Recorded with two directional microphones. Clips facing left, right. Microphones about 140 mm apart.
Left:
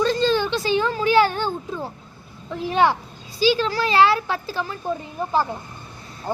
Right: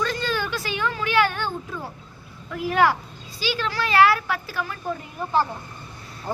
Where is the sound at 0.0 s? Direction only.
30° left (ahead or behind).